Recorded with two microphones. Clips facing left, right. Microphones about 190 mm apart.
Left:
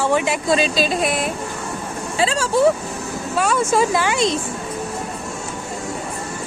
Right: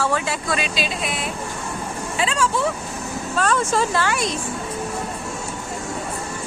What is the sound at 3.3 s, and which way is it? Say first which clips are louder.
Speech: left 3 dB; 10° left (ahead or behind).